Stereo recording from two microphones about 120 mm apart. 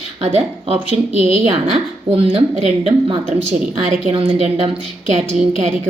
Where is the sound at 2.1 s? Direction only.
55° right (ahead or behind).